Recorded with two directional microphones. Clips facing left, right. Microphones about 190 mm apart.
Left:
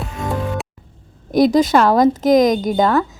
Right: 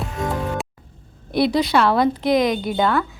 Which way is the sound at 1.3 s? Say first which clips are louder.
Left 5 dB; 45° left (ahead or behind).